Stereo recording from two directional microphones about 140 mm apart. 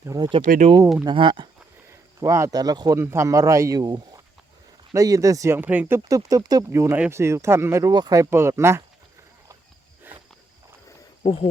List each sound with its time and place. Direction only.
0.0 s speech: 25° right (ahead or behind)
0.6 s speech: 50° right (ahead or behind)
1.0 s speech: 35° right (ahead or behind)
1.9 s speech: 20° right (ahead or behind)
6.1 s speech: 25° right (ahead or behind)
10.1 s walk: 15° right (ahead or behind)
11.2 s speech: 40° left (ahead or behind)